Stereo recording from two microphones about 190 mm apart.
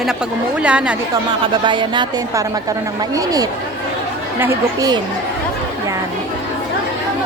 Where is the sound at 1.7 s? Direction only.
25° right (ahead or behind).